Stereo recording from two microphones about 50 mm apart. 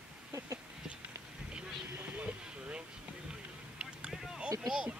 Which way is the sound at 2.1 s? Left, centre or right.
Right.